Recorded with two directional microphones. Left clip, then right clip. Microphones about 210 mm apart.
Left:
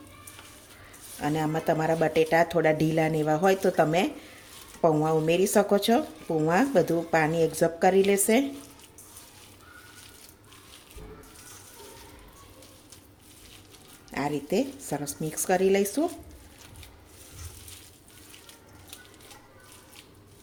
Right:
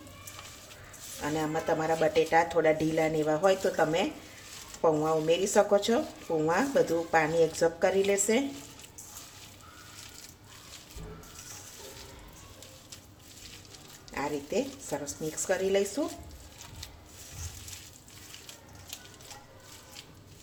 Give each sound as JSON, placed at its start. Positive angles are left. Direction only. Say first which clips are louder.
{"t": 1.2, "sound": "speech", "louder": "left 3 dB", "side_deg": 40}
{"t": 14.1, "sound": "speech", "louder": "left 4 dB", "side_deg": 45}